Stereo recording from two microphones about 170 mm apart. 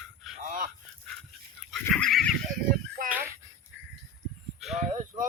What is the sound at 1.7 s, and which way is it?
Pig, 5° left (ahead or behind).